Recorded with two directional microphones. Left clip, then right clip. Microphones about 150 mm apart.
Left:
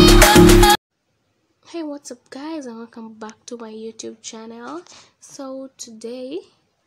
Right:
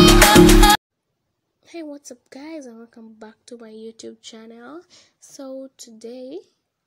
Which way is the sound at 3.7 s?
20° right (ahead or behind).